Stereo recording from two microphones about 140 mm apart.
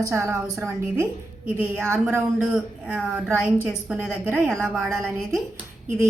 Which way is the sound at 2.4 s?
5° right (ahead or behind).